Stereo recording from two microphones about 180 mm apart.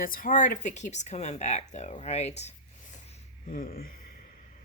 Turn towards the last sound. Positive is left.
turn(degrees=50)  # may be behind; listen again after turning